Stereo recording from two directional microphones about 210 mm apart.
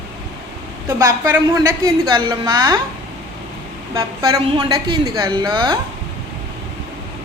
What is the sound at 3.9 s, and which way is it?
A woman's voice, 15° right (ahead or behind).